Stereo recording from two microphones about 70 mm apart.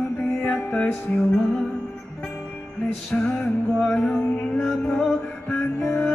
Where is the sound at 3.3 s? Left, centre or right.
Centre.